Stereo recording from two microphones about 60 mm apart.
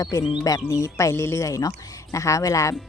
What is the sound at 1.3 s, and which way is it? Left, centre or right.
A woman's voice, left.